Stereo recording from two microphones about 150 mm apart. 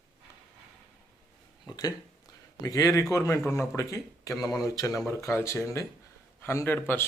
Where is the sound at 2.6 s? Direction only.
25° left (ahead or behind).